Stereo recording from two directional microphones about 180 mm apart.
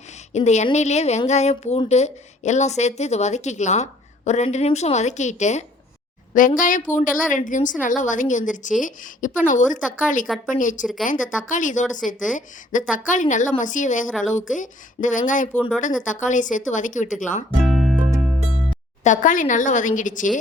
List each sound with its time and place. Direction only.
0.3 s a woman's voice: 40° left (ahead or behind)
10.2 s a woman's voice: centre (ahead or behind)
10.5 s a woman's voice: 45° left (ahead or behind)
17.6 s music: centre (ahead or behind)
19.0 s a woman's voice: 45° left (ahead or behind)